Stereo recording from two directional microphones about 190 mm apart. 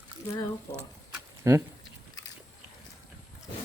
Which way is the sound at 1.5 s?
15° right (ahead or behind).